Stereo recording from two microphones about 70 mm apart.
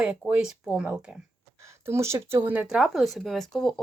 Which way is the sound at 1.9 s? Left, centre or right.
Right.